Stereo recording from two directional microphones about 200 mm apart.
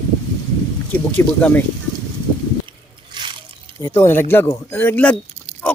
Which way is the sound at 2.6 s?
25° right (ahead or behind).